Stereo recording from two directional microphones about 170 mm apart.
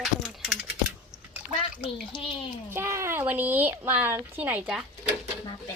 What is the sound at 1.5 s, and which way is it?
Speech, 35° left (ahead or behind).